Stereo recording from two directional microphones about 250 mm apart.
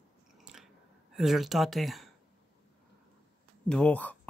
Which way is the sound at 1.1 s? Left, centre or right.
Centre.